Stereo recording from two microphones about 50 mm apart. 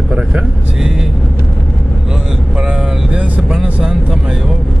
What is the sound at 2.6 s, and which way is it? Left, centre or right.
Speech, centre.